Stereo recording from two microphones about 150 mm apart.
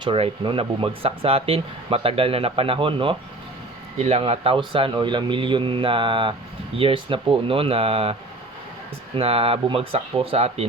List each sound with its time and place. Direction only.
0.0 s speech: 35° right (ahead or behind)
3.9 s speech: 45° right (ahead or behind)
9.1 s speech: 40° right (ahead or behind)